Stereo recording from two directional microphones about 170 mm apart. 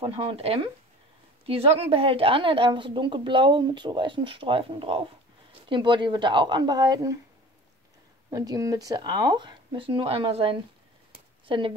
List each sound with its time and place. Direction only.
0.0 s a woman's voice: 30° right (ahead or behind)
8.3 s speech: 20° right (ahead or behind)